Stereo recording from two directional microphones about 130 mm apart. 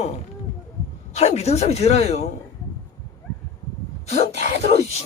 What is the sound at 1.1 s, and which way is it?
Speech, 55° left (ahead or behind).